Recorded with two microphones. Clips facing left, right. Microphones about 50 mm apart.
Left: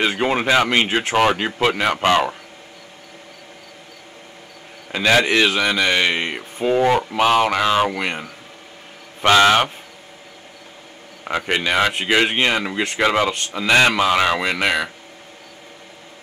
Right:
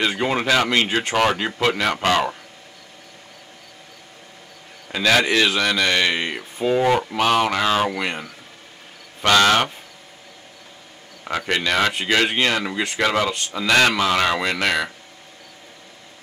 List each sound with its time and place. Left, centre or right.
0.0 s speech: centre
4.9 s speech: centre
6.8 s speech: centre
11.2 s speech: centre